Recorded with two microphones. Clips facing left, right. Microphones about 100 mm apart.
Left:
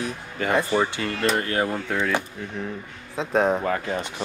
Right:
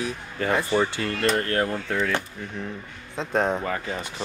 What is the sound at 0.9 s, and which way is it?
Speech, 20° left (ahead or behind).